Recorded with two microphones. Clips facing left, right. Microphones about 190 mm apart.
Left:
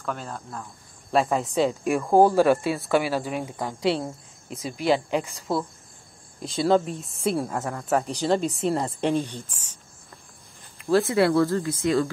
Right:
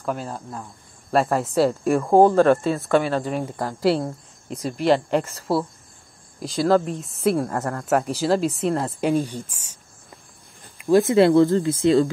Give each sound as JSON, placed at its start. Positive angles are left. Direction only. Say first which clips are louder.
{"t": 0.1, "sound": "speech", "louder": "right 5 dB", "side_deg": -35}
{"t": 1.1, "sound": "a woman's voice", "louder": "right 3 dB", "side_deg": 0}
{"t": 10.9, "sound": "speech", "louder": "right 5 dB", "side_deg": -20}